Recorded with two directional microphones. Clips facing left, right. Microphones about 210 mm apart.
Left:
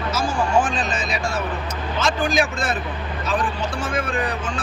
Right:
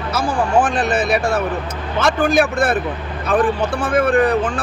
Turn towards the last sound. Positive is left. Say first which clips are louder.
# right 10 dB
turn(degrees=-55)  # may be behind; listen again after turning